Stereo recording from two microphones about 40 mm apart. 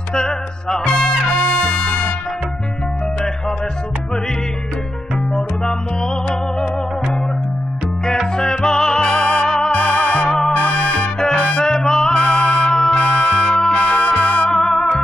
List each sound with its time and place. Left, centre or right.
0.1 s music: centre
6.2 s music: left
8.4 s music: centre